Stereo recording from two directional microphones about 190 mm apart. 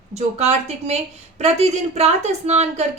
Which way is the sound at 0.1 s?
35° right (ahead or behind).